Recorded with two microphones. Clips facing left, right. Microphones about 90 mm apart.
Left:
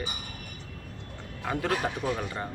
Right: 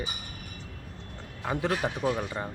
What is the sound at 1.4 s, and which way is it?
Speech, 15° right (ahead or behind).